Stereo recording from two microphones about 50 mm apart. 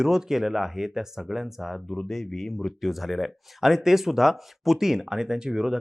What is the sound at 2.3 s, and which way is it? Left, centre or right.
Speech, centre.